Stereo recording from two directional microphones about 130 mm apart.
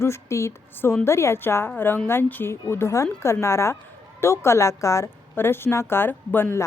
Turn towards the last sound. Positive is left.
turn(degrees=15)  # may be behind; listen again after turning